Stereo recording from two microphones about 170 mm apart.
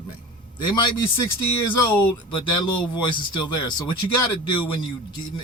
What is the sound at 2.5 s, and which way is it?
A man's voice, 25° left (ahead or behind).